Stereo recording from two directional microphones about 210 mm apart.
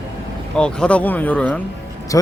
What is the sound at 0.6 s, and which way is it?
Speech, 5° left (ahead or behind).